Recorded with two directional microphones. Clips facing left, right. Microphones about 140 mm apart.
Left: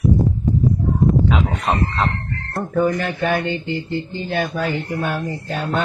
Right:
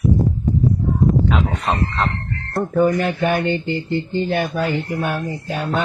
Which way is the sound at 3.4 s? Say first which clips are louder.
Right 3 dB; 15° left (ahead or behind).